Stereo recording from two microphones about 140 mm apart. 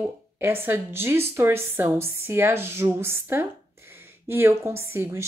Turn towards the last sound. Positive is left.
turn(degrees=-15)  # may be behind; listen again after turning